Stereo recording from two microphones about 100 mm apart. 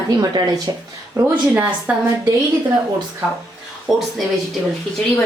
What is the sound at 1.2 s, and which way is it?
Speech, 15° right (ahead or behind).